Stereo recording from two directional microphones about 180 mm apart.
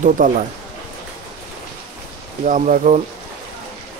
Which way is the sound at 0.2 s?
50° right (ahead or behind).